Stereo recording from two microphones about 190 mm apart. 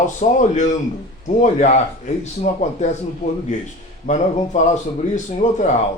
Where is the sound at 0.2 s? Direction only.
40° left (ahead or behind).